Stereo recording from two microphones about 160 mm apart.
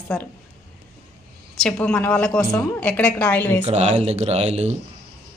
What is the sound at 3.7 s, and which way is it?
Speech, 40° right (ahead or behind).